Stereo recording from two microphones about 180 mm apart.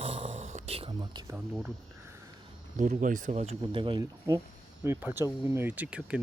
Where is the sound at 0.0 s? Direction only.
30° right (ahead or behind).